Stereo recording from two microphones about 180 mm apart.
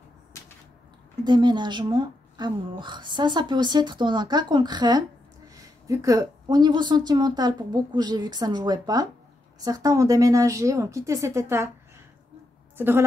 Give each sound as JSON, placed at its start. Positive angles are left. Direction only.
{"t": 1.2, "sound": "a woman's voice", "side_deg": -25}
{"t": 12.7, "sound": "a woman's voice", "side_deg": -10}